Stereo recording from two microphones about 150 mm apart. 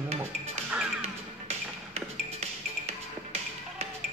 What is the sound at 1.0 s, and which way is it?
Music, 45° right (ahead or behind).